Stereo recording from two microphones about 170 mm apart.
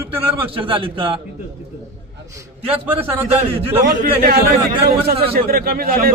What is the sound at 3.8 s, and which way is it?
A man's voice, 55° right (ahead or behind).